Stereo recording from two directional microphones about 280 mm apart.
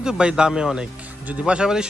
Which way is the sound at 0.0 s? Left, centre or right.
Centre.